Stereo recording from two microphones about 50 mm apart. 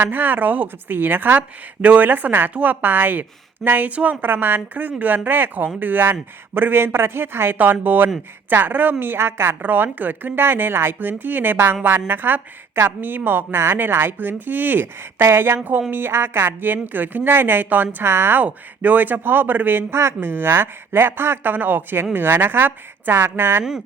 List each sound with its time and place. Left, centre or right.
0.0 s a woman's voice: right
2.5 s a woman's voice: right
2.8 s a woman's voice: right
9.6 s a woman's voice: right
15.2 s a woman's voice: right
18.0 s speech: right
18.3 s a woman's voice: right
21.5 s a woman's voice: right